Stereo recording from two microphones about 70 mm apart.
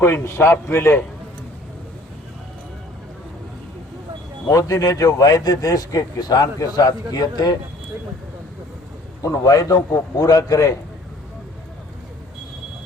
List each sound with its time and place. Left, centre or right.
0.0 s a man's voice: left
4.4 s speech: left
9.4 s speech: left